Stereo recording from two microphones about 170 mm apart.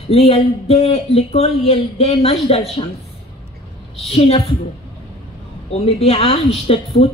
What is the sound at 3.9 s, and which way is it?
Speech, 35° left (ahead or behind).